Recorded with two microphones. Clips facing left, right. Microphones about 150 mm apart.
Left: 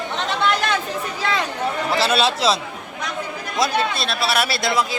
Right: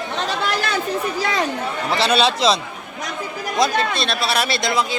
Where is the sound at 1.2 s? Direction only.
40° right (ahead or behind).